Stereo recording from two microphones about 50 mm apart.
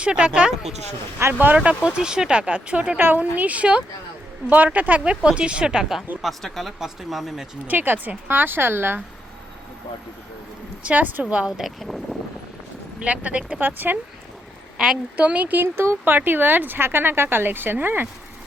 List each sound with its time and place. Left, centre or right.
0.0 s a woman's voice: centre
1.3 s speech: right
1.5 s a woman's voice: centre
3.0 s a woman's voice: right; by 6.0 s centre
6.2 s speech: centre
7.7 s speech: right
8.3 s speech: right
10.8 s a woman's voice: right
11.4 s speech: centre
13.1 s a woman's voice: right
13.6 s speech: right
15.1 s a woman's voice: right
15.5 s speech: right
16.1 s speech: right